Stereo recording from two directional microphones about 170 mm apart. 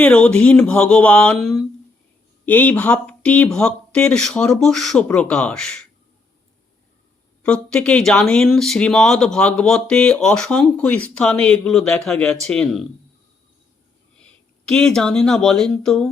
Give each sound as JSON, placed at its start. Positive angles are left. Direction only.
{"t": 0.0, "sound": "speech", "side_deg": 5}
{"t": 7.4, "sound": "speech", "side_deg": 5}
{"t": 14.2, "sound": "speech", "side_deg": 5}